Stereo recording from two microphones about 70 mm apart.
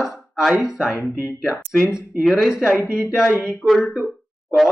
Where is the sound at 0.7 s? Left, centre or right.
Centre.